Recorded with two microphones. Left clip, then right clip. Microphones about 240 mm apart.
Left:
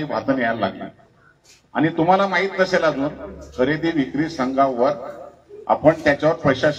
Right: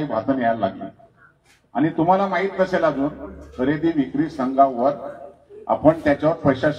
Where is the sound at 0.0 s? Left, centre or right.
Left.